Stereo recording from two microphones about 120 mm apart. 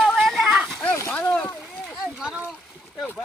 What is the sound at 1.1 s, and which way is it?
Speech, 10° left (ahead or behind).